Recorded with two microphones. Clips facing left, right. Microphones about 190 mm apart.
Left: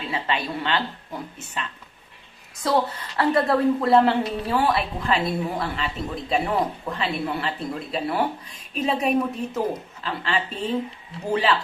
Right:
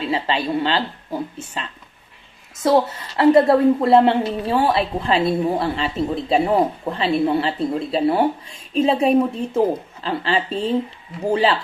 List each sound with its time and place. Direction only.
0.1 s a woman's voice: 30° right (ahead or behind)
2.6 s a woman's voice: 25° right (ahead or behind)